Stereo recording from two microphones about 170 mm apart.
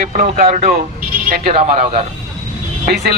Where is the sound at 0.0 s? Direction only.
50° right (ahead or behind).